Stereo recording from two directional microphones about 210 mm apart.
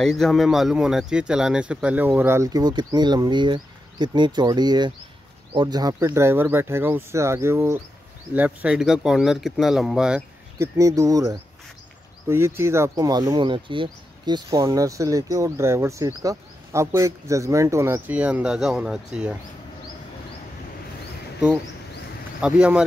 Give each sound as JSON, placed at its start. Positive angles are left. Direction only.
{"t": 0.0, "sound": "speech", "side_deg": 0}
{"t": 10.8, "sound": "speech", "side_deg": -15}
{"t": 22.4, "sound": "speech", "side_deg": -5}